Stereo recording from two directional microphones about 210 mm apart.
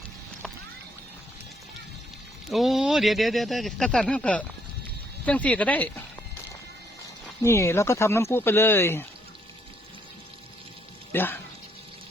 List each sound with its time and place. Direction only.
2.5 s speech: centre (ahead or behind)
7.4 s speech: 15° left (ahead or behind)
11.1 s speech: 10° left (ahead or behind)